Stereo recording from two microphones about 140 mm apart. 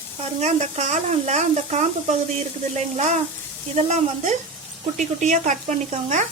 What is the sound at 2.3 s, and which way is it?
Stir, 55° right (ahead or behind).